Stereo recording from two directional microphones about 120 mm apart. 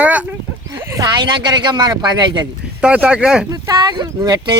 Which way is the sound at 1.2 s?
40° right (ahead or behind).